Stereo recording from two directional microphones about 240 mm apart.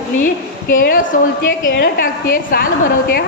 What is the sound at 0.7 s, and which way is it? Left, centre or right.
A woman's voice, left.